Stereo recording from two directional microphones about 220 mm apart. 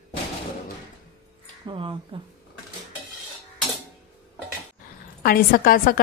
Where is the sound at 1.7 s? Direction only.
20° right (ahead or behind).